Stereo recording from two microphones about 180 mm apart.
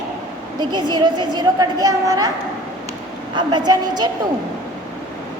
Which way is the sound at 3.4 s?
25° right (ahead or behind).